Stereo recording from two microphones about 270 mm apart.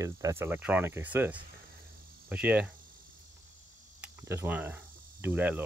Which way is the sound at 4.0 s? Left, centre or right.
Centre.